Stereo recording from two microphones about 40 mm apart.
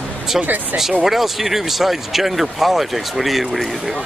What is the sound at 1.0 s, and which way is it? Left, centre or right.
Speech, centre.